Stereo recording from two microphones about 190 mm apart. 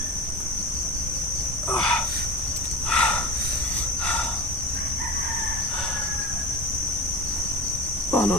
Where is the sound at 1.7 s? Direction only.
5° left (ahead or behind).